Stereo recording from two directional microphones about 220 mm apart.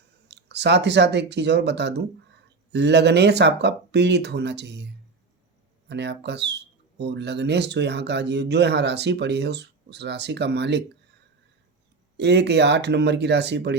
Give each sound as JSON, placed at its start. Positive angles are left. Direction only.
{"t": 0.3, "sound": "speech", "side_deg": -50}
{"t": 5.9, "sound": "speech", "side_deg": -50}
{"t": 12.1, "sound": "speech", "side_deg": -50}